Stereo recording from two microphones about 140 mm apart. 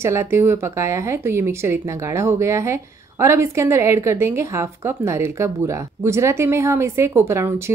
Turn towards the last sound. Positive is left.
turn(degrees=-20)  # may be behind; listen again after turning